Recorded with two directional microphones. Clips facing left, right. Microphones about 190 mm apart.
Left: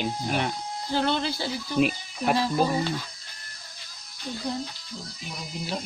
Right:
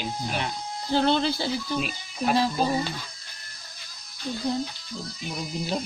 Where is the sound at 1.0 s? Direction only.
25° right (ahead or behind).